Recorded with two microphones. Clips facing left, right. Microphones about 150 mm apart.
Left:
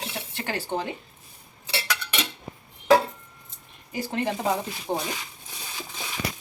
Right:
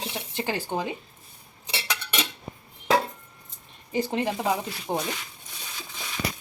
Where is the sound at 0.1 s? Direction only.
15° right (ahead or behind).